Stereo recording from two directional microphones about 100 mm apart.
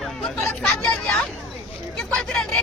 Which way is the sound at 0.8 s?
10° left (ahead or behind).